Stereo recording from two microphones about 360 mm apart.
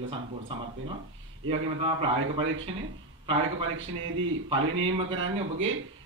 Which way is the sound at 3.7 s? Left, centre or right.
Right.